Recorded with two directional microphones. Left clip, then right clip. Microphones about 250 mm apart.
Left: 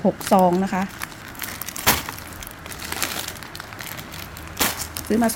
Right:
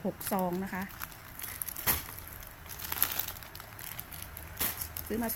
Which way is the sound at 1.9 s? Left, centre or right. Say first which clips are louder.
Left 15 dB; left.